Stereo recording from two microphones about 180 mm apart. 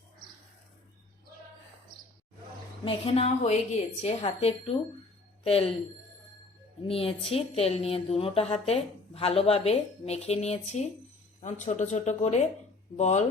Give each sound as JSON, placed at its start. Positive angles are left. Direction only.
{"t": 2.8, "sound": "speech", "side_deg": 35}
{"t": 6.8, "sound": "speech", "side_deg": 30}